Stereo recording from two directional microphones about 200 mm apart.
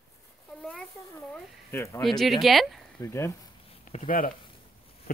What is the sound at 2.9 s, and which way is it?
Speech, 15° left (ahead or behind).